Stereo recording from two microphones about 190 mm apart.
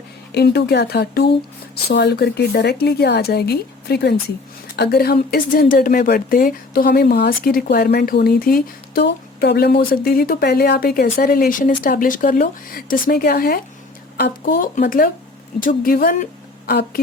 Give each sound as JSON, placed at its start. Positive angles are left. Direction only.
{"t": 0.3, "sound": "a woman's voice", "side_deg": 60}